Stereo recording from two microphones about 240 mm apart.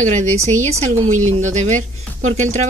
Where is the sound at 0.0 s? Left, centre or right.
Right.